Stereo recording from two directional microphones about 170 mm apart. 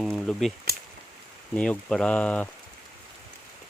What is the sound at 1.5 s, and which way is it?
Speech, 5° left (ahead or behind).